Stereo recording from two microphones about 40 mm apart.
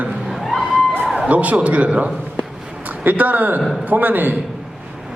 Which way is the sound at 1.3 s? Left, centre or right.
Right.